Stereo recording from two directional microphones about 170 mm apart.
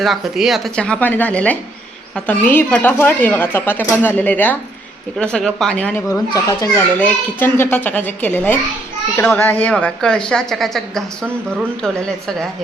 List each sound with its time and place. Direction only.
0.0 s a woman's voice: centre (ahead or behind)
6.1 s a child's voice: 20° left (ahead or behind); by 12.5 s 5° left (ahead or behind)